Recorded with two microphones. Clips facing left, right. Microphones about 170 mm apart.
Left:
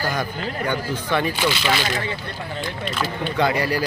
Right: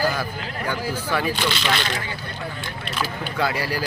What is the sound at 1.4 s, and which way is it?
Speech, 10° left (ahead or behind).